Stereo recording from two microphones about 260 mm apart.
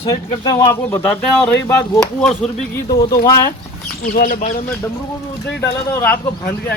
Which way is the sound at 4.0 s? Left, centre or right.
Left.